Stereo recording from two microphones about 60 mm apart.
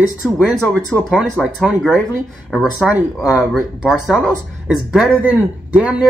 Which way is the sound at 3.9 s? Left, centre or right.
Centre.